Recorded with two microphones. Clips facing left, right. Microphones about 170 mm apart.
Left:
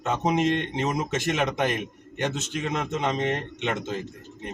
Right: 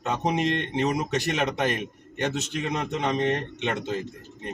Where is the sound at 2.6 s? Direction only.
20° left (ahead or behind).